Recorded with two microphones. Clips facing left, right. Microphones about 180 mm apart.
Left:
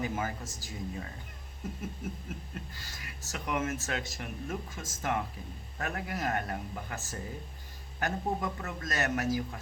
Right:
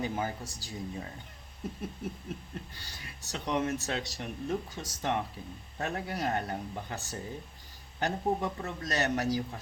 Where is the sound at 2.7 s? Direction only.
30° right (ahead or behind).